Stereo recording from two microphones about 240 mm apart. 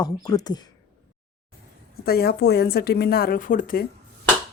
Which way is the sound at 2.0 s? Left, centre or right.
Left.